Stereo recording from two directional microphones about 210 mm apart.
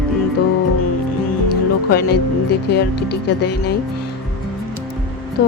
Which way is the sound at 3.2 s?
50° left (ahead or behind).